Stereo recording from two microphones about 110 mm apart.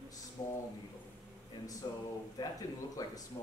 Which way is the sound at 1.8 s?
35° left (ahead or behind).